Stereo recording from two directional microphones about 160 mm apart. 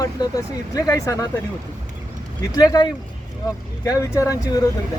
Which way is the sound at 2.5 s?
25° left (ahead or behind).